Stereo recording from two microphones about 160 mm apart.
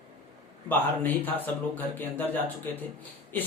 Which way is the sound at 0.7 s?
10° left (ahead or behind).